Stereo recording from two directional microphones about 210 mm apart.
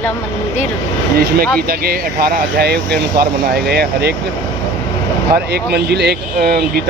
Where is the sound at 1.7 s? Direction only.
45° right (ahead or behind).